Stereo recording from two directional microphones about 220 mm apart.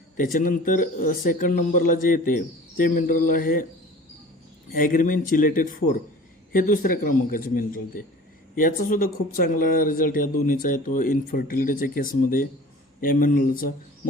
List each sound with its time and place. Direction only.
0.3 s speech: 35° left (ahead or behind)
4.7 s speech: 40° left (ahead or behind)